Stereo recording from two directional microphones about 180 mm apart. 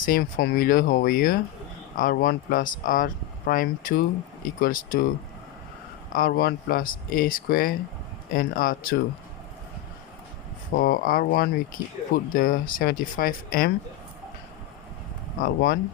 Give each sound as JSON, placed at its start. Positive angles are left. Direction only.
{"t": 0.0, "sound": "speech", "side_deg": 50}
{"t": 6.1, "sound": "speech", "side_deg": 55}
{"t": 10.8, "sound": "speech", "side_deg": 55}
{"t": 15.4, "sound": "speech", "side_deg": 55}